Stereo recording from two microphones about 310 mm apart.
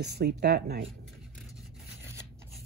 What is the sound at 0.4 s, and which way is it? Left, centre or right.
Speech, right.